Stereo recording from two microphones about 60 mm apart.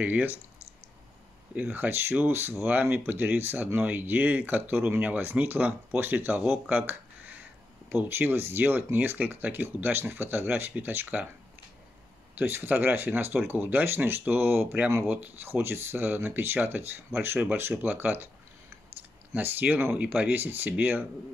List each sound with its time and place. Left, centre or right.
0.0 s speech: right
1.5 s speech: right
6.7 s a sound: right
7.9 s speech: right
12.4 s speech: right
19.4 s speech: right